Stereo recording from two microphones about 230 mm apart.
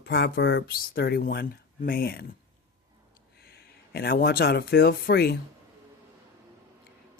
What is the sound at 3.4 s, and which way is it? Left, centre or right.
Speech, left.